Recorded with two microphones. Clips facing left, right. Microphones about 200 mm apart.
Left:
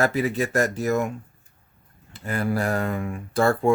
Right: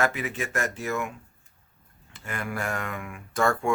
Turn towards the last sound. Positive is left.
turn(degrees=35)  # may be behind; listen again after turning